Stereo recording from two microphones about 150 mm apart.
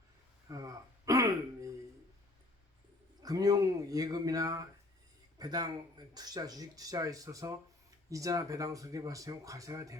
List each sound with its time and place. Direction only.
0.4 s throat clearing: 20° right (ahead or behind)
3.2 s speech: 25° right (ahead or behind)